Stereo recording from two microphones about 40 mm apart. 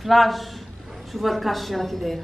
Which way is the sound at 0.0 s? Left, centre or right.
Centre.